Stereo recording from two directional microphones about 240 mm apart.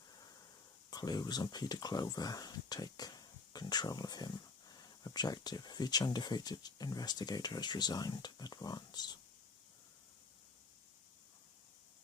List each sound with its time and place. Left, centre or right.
0.9 s speech: centre